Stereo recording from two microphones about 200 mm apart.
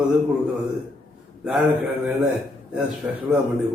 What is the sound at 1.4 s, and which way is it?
Speech, 5° right (ahead or behind).